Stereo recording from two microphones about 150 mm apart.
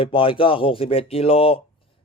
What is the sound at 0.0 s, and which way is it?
A man's voice, 35° left (ahead or behind).